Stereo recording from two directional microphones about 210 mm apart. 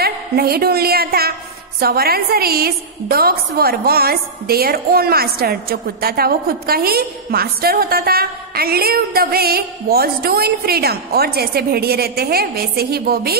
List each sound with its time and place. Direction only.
0.0 s a woman's voice: 45° right (ahead or behind)